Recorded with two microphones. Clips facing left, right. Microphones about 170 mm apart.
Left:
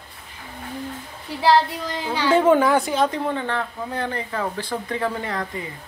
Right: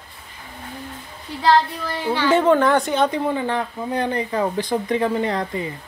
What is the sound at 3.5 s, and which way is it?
Speech, 15° right (ahead or behind).